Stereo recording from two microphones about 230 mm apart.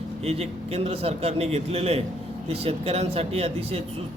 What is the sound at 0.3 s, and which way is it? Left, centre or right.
Speech, right.